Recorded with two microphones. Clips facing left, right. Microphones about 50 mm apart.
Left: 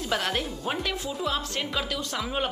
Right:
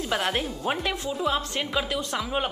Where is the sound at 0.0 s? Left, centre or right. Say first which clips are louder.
Right 1 dB; centre.